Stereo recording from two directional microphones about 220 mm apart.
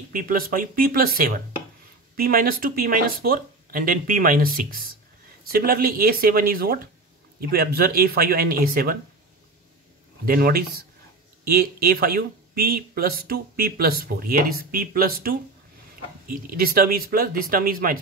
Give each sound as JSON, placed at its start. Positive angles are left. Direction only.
{"t": 0.1, "sound": "speech", "side_deg": -40}
{"t": 10.2, "sound": "speech", "side_deg": -40}